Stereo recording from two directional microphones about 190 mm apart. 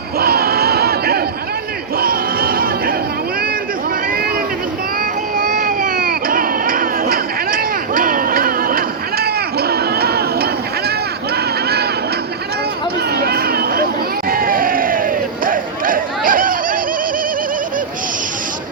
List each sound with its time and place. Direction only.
0.2 s a sound: 55° right (ahead or behind)
2.0 s music: 50° right (ahead or behind)
5.4 s baby cry: 45° right (ahead or behind)
11.3 s a sound: 55° right (ahead or behind)
13.1 s children playing: 55° right (ahead or behind)
14.3 s crowd: 50° right (ahead or behind)